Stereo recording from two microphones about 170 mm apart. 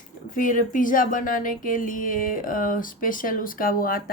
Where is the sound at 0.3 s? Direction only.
50° left (ahead or behind).